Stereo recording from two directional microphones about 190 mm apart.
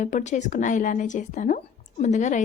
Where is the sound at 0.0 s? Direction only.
40° left (ahead or behind).